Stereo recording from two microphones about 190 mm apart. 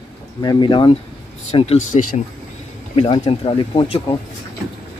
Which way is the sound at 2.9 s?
30° left (ahead or behind).